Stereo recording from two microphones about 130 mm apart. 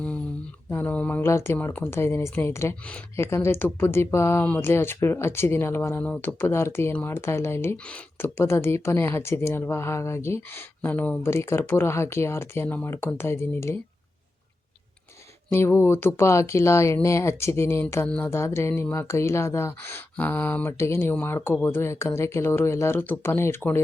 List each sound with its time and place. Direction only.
0.7 s speech: 15° left (ahead or behind)
15.5 s speech: 20° left (ahead or behind)